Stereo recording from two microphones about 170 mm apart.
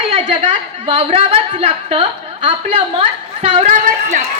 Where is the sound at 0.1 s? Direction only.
40° right (ahead or behind).